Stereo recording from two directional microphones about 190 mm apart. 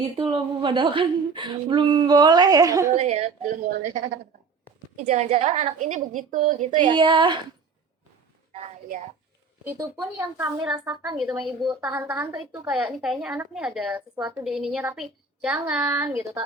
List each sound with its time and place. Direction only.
0.2 s a woman's voice: 25° right (ahead or behind)
2.9 s a woman's voice: 35° right (ahead or behind)
6.7 s a woman's voice: 25° right (ahead or behind)
8.5 s a sound: 35° right (ahead or behind)
10.2 s a woman's voice: 15° right (ahead or behind)
10.7 s a woman's voice: 5° right (ahead or behind)